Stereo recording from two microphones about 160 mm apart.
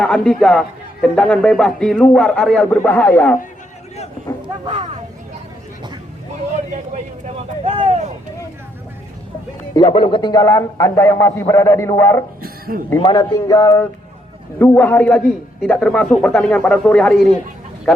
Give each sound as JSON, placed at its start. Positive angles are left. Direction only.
{"t": 0.0, "sound": "a man's voice", "side_deg": 5}
{"t": 4.6, "sound": "speech", "side_deg": -30}
{"t": 7.6, "sound": "speech", "side_deg": -35}
{"t": 9.7, "sound": "a man's voice", "side_deg": 30}
{"t": 12.4, "sound": "a sound", "side_deg": -70}
{"t": 13.0, "sound": "a man's voice", "side_deg": 30}